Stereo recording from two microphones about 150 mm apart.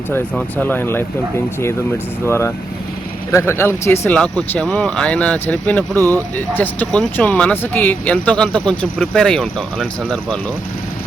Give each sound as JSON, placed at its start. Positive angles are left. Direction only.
{"t": 0.3, "sound": "speech", "side_deg": 10}
{"t": 2.2, "sound": "speech", "side_deg": 15}
{"t": 5.9, "sound": "speech", "side_deg": -20}
{"t": 6.3, "sound": "speech", "side_deg": 10}